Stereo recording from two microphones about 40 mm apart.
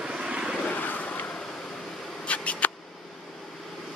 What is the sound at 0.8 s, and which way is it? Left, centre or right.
Vehicle, left.